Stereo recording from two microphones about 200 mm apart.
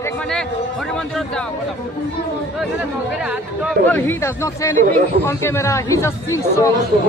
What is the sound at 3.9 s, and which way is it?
Speech, 10° left (ahead or behind).